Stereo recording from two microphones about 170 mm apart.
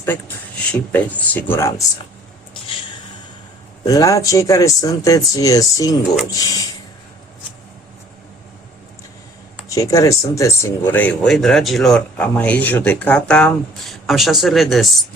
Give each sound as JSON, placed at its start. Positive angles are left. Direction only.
{"t": 0.7, "sound": "speech", "side_deg": 10}
{"t": 3.8, "sound": "speech", "side_deg": 20}
{"t": 9.6, "sound": "speech", "side_deg": 20}